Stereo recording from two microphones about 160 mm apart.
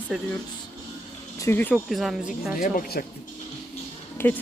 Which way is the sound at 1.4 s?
15° left (ahead or behind).